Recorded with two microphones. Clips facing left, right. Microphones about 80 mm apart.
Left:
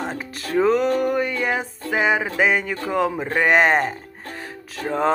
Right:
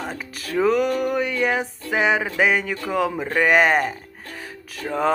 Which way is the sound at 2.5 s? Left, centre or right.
Centre.